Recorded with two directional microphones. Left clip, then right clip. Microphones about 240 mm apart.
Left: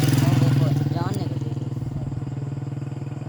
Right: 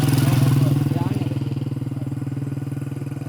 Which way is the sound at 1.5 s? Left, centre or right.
Right.